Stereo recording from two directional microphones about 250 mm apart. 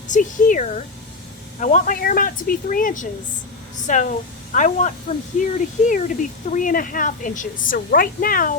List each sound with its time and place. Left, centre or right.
0.1 s a woman's voice: left